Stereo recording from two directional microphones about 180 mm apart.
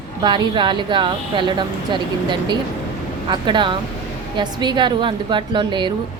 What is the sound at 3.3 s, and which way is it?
Speech, 25° right (ahead or behind).